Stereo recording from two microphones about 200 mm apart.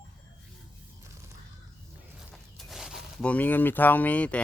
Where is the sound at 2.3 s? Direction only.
Centre (ahead or behind).